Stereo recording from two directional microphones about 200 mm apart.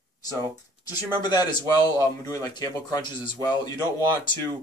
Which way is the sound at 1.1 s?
20° left (ahead or behind).